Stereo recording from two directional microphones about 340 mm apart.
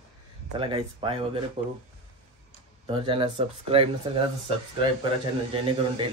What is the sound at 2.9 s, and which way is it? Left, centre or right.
Speech, centre.